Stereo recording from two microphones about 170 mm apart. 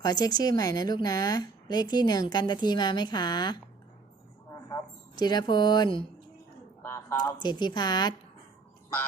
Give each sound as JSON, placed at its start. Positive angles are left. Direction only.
{"t": 0.0, "sound": "speech", "side_deg": 25}
{"t": 4.7, "sound": "speech", "side_deg": 25}
{"t": 6.8, "sound": "a sound", "side_deg": 15}
{"t": 7.4, "sound": "speech", "side_deg": 25}